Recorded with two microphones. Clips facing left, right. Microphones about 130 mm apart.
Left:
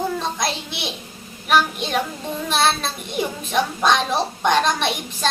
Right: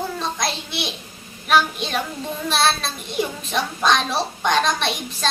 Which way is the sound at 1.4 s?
10° left (ahead or behind).